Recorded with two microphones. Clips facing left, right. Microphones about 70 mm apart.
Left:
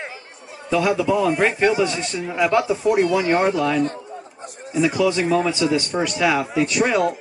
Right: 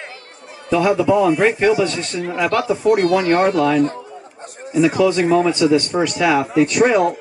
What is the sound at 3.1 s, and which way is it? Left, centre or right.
Speech, centre.